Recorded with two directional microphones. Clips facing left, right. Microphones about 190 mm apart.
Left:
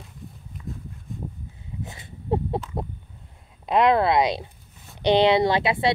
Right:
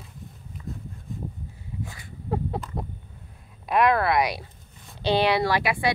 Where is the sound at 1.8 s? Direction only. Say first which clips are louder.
Even; 20° left (ahead or behind).